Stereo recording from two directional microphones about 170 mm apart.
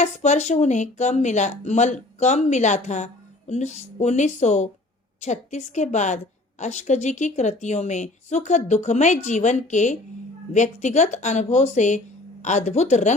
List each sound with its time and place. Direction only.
0.0 s a woman's voice: 45° left (ahead or behind)